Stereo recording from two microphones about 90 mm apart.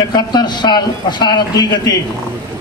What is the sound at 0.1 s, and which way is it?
Speech, 50° left (ahead or behind).